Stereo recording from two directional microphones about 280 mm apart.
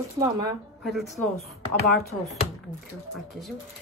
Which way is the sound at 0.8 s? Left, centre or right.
Centre.